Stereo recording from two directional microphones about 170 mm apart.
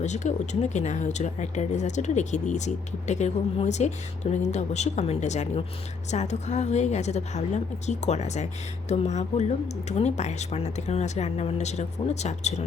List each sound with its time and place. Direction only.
0.0 s speech: 45° left (ahead or behind)